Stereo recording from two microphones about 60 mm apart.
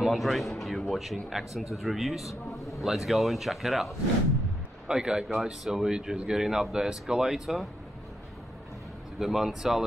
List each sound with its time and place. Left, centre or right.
0.0 s speech: centre
2.2 s a sound: left
2.8 s speech: centre
4.8 s a man's voice: centre
9.2 s speech: centre